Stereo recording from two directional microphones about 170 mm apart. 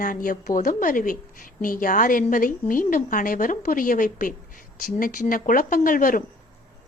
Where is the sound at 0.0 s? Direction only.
55° left (ahead or behind).